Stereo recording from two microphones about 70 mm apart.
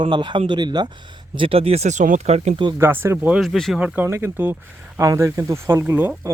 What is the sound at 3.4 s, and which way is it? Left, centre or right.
Speech, centre.